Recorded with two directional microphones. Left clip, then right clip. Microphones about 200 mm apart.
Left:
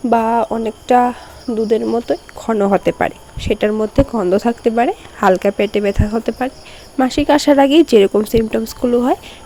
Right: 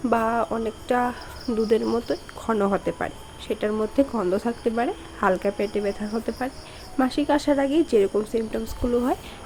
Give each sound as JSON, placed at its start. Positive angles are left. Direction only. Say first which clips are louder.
{"t": 0.1, "sound": "speech", "louder": "left 9 dB", "side_deg": 25}